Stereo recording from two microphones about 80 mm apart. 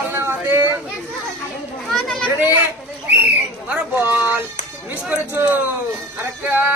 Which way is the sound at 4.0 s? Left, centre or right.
Right.